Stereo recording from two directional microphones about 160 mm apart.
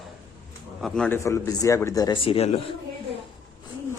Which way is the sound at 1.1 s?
20° left (ahead or behind).